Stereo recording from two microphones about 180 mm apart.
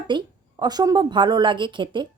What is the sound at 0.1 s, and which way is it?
A woman's voice, 25° right (ahead or behind).